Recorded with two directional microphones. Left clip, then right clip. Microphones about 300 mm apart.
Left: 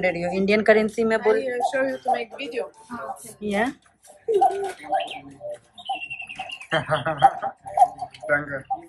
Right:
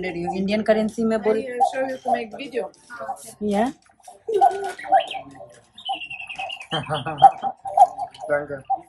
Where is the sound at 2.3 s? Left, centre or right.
Right.